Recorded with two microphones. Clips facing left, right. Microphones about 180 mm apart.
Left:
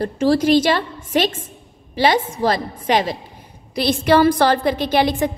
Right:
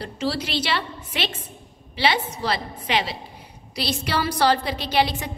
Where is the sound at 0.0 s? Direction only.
50° left (ahead or behind).